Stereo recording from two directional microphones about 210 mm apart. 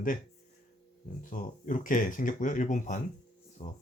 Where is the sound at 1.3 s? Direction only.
40° left (ahead or behind).